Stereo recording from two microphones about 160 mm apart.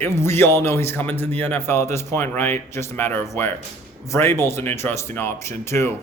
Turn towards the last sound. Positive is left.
turn(degrees=15)  # may be behind; listen again after turning